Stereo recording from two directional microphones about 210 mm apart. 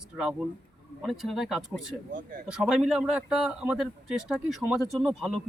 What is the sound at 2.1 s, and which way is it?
Speech, 40° right (ahead or behind).